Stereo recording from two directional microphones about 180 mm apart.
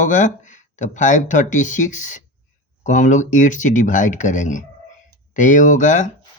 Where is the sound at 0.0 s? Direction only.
45° left (ahead or behind).